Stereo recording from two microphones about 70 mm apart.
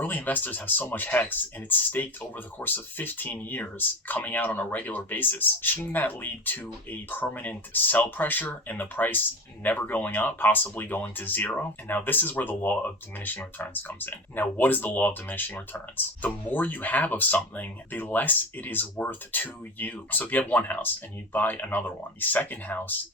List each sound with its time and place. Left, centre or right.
0.0 s speech: left